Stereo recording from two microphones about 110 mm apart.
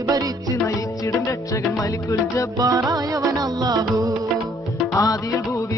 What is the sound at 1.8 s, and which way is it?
Music, 30° left (ahead or behind).